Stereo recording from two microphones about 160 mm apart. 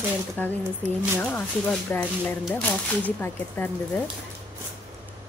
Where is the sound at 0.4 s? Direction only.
10° left (ahead or behind).